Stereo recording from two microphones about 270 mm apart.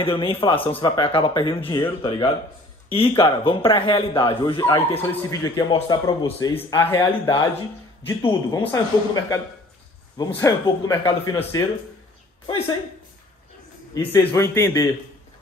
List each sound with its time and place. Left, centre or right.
0.0 s speech: centre
14.1 s speech: centre